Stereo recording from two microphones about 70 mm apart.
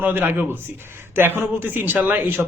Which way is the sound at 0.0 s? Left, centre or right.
Right.